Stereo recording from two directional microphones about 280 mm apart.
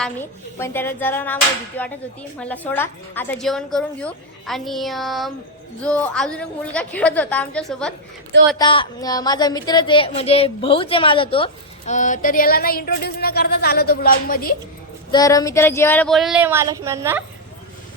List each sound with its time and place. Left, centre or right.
0.0 s a woman's voice: centre
8.5 s speech: centre
15.1 s a woman's voice: centre